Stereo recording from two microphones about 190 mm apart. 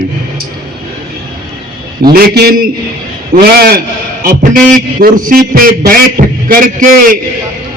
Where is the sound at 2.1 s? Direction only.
55° right (ahead or behind).